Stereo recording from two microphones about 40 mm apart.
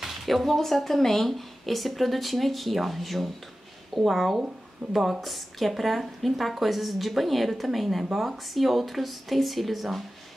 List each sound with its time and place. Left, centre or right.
0.0 s a woman's voice: centre
4.8 s a woman's voice: right
5.2 s a woman's voice: centre